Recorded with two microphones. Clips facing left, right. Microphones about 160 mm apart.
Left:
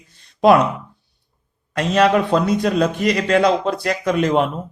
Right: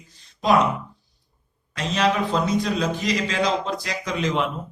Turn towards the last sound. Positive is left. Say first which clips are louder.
# left 7 dB
turn(degrees=55)  # may be behind; listen again after turning